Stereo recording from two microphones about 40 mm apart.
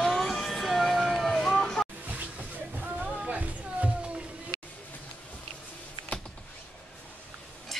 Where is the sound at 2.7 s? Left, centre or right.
Right.